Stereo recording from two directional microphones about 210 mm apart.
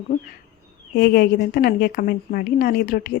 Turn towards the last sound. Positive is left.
turn(degrees=45)  # may be behind; listen again after turning